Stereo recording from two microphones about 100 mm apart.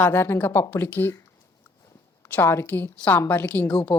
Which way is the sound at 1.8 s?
30° left (ahead or behind).